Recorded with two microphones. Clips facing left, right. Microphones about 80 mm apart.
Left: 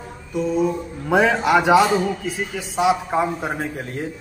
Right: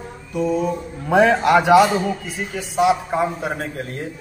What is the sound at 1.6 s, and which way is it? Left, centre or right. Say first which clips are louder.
Speech: right 2 dB; left.